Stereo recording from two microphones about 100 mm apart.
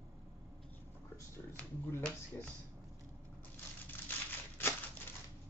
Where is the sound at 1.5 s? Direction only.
15° left (ahead or behind).